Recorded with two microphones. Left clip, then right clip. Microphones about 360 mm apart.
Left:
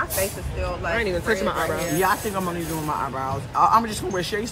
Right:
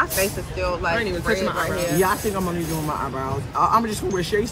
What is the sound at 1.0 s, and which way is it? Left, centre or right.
Speech, left.